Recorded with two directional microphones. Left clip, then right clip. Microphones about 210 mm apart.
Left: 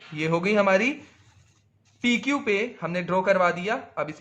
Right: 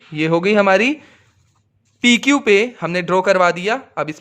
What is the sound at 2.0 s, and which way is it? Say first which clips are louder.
A man's voice: right 10 dB; 55° right (ahead or behind).